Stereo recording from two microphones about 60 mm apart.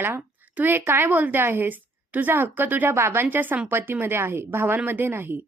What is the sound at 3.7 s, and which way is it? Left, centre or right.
A woman's voice, right.